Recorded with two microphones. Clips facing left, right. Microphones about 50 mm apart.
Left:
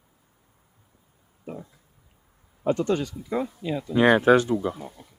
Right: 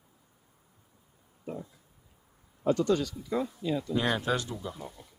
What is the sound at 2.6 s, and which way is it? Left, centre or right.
Speech, left.